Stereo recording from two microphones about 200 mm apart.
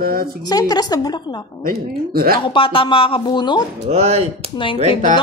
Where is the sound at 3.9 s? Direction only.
35° right (ahead or behind).